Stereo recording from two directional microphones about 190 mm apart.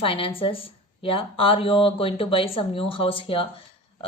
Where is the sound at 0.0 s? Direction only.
30° left (ahead or behind).